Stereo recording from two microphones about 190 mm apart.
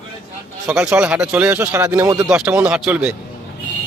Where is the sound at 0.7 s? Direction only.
5° right (ahead or behind).